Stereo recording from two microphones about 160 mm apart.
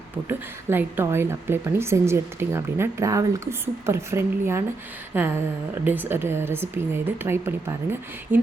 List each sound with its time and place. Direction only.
0.3 s speech: 10° right (ahead or behind)